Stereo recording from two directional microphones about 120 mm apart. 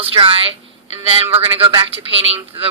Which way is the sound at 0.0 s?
50° right (ahead or behind).